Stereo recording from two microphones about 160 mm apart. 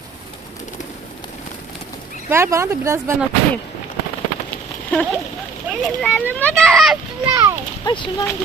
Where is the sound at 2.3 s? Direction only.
15° right (ahead or behind).